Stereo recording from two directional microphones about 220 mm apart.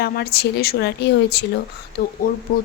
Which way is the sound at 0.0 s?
45° left (ahead or behind).